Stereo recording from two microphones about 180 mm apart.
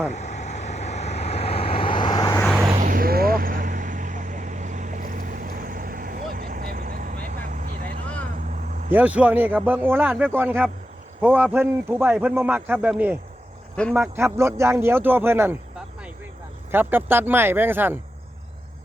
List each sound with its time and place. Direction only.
0.1 s vehicle: 40° left (ahead or behind); by 2.4 s 25° left (ahead or behind)
2.4 s vehicle: 5° left (ahead or behind)
2.7 s vehicle: 50° right (ahead or behind)
8.9 s a man's voice: 10° right (ahead or behind)
16.7 s a man's voice: 10° right (ahead or behind)